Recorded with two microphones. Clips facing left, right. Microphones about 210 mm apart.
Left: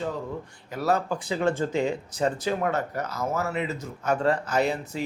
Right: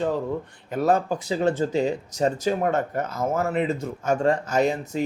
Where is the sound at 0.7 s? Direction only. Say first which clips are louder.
Right 4 dB; 50° right (ahead or behind).